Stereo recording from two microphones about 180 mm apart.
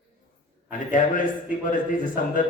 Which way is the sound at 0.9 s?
50° left (ahead or behind).